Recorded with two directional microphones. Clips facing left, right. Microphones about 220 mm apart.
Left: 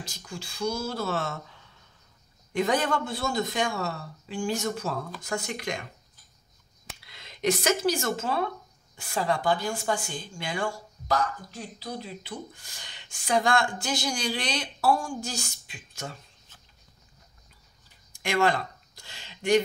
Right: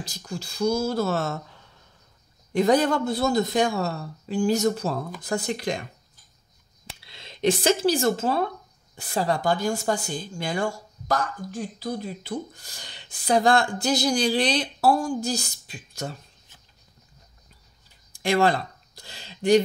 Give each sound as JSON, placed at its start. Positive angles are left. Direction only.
{"t": 0.0, "sound": "speech", "side_deg": -35}
{"t": 2.5, "sound": "speech", "side_deg": -35}
{"t": 7.1, "sound": "speech", "side_deg": -30}
{"t": 18.1, "sound": "a sound", "side_deg": -35}